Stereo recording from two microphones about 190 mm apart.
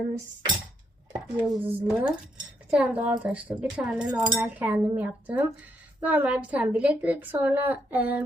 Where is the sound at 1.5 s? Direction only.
10° right (ahead or behind).